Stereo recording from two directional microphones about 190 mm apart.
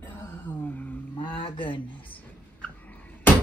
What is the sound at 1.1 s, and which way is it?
Speech, 25° left (ahead or behind).